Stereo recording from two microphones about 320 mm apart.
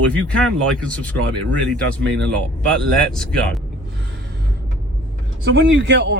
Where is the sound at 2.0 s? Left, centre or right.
Right.